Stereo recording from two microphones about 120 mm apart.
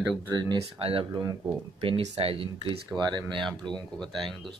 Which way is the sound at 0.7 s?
50° right (ahead or behind).